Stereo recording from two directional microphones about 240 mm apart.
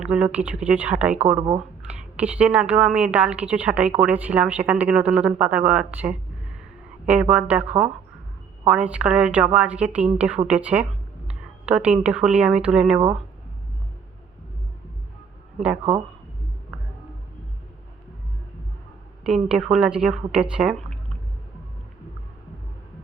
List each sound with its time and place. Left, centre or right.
0.0 s a woman's voice: centre
1.4 s speech: centre
1.9 s a woman's voice: centre
19.2 s a woman's voice: centre